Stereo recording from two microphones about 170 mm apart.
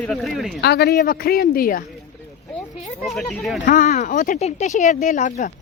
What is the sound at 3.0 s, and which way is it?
Speech, centre (ahead or behind).